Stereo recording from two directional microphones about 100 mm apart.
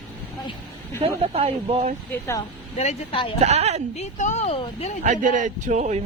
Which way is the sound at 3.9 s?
90° left.